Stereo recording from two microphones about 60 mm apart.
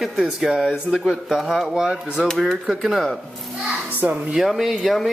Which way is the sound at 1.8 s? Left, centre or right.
Centre.